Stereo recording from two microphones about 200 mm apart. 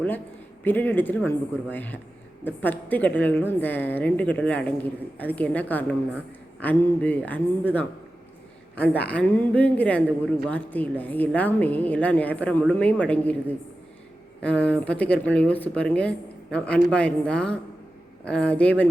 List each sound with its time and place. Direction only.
0.6 s a woman's voice: 10° left (ahead or behind)
14.4 s a woman's voice: 5° left (ahead or behind)